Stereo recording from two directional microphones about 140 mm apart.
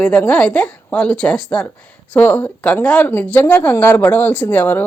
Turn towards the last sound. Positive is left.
turn(degrees=15)  # may be behind; listen again after turning